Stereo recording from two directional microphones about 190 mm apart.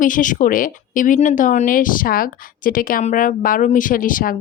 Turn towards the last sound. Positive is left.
turn(degrees=50)  # may be behind; listen again after turning